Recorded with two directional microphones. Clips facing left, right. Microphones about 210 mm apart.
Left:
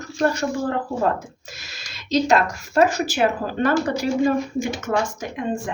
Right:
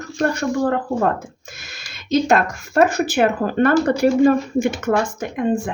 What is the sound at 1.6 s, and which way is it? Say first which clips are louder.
Speech: right 1 dB; 55° right (ahead or behind).